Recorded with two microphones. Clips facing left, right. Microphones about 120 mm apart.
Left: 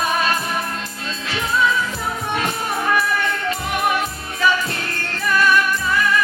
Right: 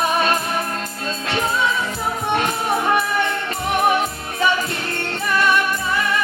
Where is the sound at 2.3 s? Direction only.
25° right (ahead or behind).